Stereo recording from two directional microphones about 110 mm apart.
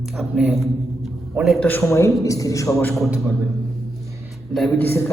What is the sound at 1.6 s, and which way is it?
Speech, 15° left (ahead or behind).